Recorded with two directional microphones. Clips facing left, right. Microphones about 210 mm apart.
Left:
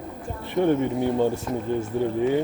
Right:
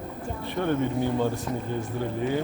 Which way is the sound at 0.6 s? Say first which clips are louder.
Left 4 dB; 25° left (ahead or behind).